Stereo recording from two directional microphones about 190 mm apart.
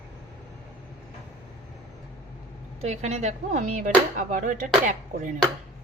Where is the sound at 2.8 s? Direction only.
35° right (ahead or behind).